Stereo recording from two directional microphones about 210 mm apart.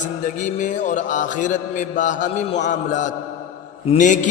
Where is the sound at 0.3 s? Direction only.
35° left (ahead or behind).